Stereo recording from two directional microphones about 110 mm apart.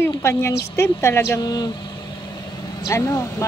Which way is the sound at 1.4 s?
40° left (ahead or behind).